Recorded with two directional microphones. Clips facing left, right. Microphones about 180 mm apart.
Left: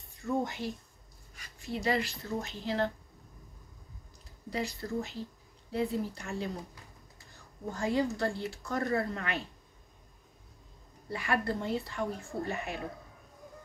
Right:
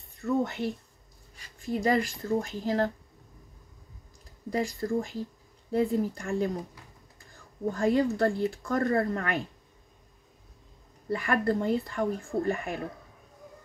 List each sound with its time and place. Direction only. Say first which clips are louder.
0.2 s speech: right 5 dB; 60° right (ahead or behind)
1.6 s speech: right 5 dB; 45° right (ahead or behind)
4.5 s speech: right 6 dB; 50° right (ahead or behind)
7.7 s speech: right 5 dB; 55° right (ahead or behind)
11.1 s speech: right 5 dB; 50° right (ahead or behind)